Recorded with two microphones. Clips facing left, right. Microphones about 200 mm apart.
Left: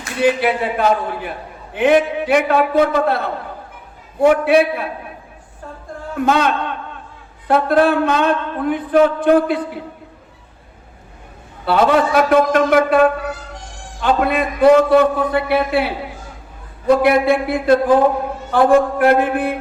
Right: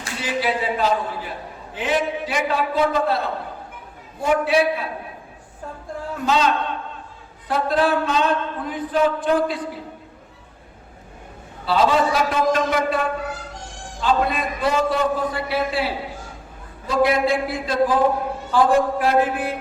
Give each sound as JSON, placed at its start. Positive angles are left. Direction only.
{"t": 0.2, "sound": "a man's voice", "side_deg": 60}
{"t": 6.1, "sound": "a man's voice", "side_deg": 60}
{"t": 11.6, "sound": "a man's voice", "side_deg": 60}